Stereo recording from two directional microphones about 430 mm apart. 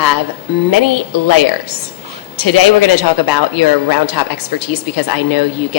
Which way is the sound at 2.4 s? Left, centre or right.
Left.